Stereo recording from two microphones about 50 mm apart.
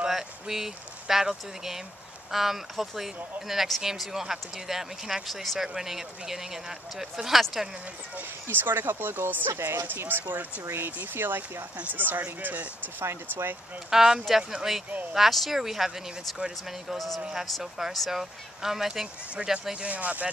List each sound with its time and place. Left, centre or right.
0.0 s speech: centre
5.3 s speech: centre
8.5 s speech: right
13.8 s speech: centre
16.9 s speech: centre
17.2 s speech: centre
19.9 s speech: right